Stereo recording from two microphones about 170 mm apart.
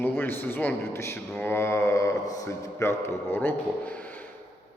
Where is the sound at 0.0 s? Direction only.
10° left (ahead or behind).